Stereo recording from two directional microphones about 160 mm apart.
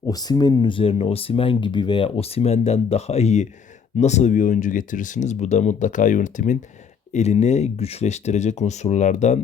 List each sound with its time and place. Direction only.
0.0 s speech: 25° left (ahead or behind); by 9.4 s 50° left (ahead or behind)